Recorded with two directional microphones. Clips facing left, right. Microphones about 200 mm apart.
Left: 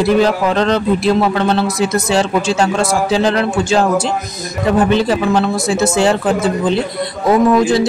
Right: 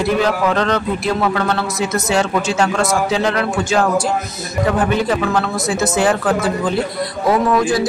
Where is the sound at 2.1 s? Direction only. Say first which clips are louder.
Left 2 dB; 30° left (ahead or behind).